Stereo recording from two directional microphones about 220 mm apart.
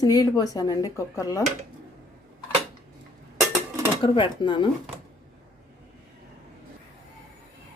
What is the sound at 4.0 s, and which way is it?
Speech, 20° left (ahead or behind).